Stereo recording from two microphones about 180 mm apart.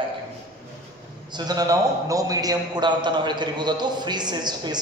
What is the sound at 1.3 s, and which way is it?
A man's voice, 25° right (ahead or behind).